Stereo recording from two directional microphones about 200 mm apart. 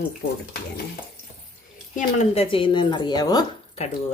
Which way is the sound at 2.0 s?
35° left (ahead or behind).